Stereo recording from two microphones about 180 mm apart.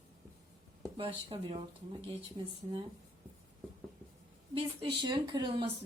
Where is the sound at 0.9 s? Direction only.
30° right (ahead or behind).